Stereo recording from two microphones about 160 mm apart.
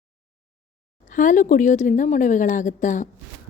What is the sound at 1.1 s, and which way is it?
A woman's voice, 55° left (ahead or behind).